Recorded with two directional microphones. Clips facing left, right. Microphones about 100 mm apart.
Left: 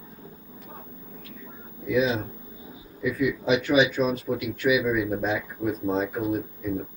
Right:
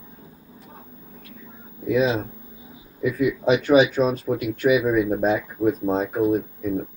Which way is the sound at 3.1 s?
40° right (ahead or behind).